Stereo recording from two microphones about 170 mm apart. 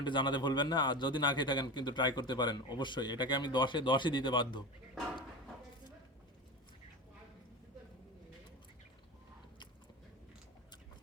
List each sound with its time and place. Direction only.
0.0 s a man's voice: 25° left (ahead or behind)